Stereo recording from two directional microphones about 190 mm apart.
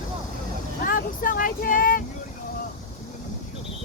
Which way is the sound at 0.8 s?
45° left (ahead or behind).